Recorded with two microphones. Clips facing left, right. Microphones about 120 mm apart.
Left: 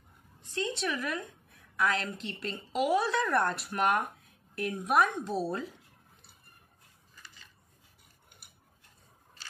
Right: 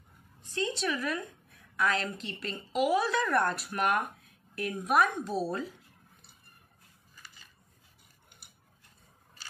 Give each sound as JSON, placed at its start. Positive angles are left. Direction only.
{"t": 0.6, "sound": "a woman's voice", "side_deg": 15}